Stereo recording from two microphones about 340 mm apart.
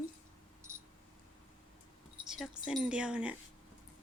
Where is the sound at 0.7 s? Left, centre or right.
Centre.